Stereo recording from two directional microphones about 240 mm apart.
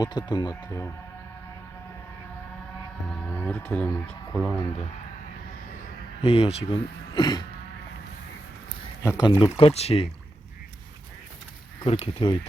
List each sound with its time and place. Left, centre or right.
0.0 s speech: centre
3.1 s speech: centre
6.2 s speech: left
9.0 s speech: centre
11.8 s speech: left